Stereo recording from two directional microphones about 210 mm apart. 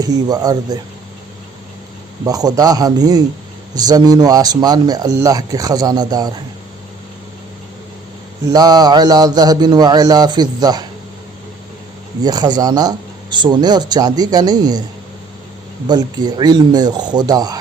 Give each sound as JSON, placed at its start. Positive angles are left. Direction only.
{"t": 0.0, "sound": "speech", "side_deg": -20}
{"t": 2.2, "sound": "speech", "side_deg": -15}
{"t": 8.4, "sound": "speech", "side_deg": -20}
{"t": 12.2, "sound": "speech", "side_deg": -20}
{"t": 15.9, "sound": "speech", "side_deg": -20}